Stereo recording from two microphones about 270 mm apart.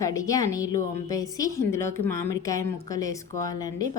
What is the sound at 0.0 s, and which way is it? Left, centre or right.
A woman's voice, centre.